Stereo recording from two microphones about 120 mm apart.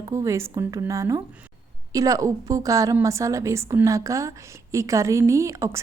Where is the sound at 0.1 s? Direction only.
25° right (ahead or behind).